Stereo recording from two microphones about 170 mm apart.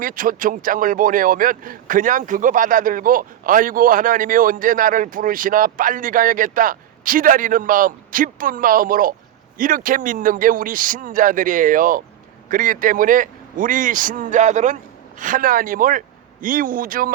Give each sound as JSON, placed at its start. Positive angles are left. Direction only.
{"t": 0.0, "sound": "a man's voice", "side_deg": -55}